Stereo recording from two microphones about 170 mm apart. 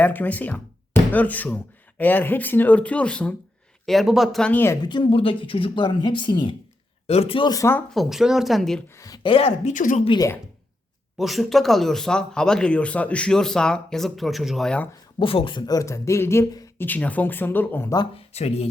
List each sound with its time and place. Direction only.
0.0 s speech: 10° left (ahead or behind)
7.9 s speech: centre (ahead or behind)
8.9 s speech: 20° left (ahead or behind); by 9.7 s 35° left (ahead or behind)
9.7 s a woman's voice: 50° left (ahead or behind)
10.0 s speech: 30° left (ahead or behind)
11.2 s speech: centre (ahead or behind)
15.2 s speech: 30° left (ahead or behind)
18.3 s speech: 35° left (ahead or behind)